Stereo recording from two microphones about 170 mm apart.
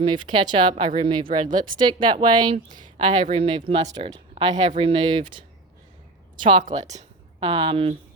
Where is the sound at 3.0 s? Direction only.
45° right (ahead or behind).